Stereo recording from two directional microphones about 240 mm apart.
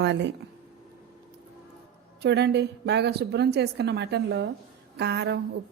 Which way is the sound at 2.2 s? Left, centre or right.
Right.